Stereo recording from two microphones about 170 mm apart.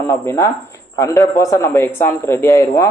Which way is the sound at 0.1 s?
15° left (ahead or behind).